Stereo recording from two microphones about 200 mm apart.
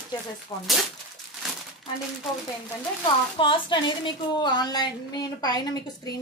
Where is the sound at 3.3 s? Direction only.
25° left (ahead or behind).